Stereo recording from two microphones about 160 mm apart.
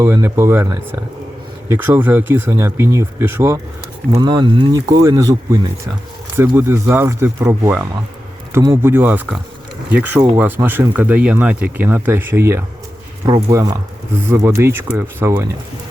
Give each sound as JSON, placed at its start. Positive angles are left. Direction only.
{"t": 0.0, "sound": "speech", "side_deg": -15}
{"t": 4.2, "sound": "speech", "side_deg": -30}